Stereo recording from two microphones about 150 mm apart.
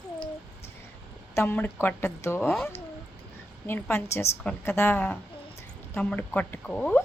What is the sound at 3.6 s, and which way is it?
Speech, 15° left (ahead or behind).